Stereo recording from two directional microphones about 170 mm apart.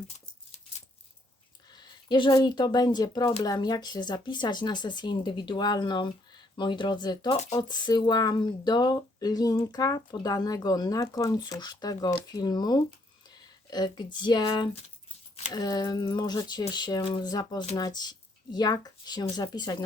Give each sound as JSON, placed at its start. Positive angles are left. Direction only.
{"t": 1.7, "sound": "speech", "side_deg": 25}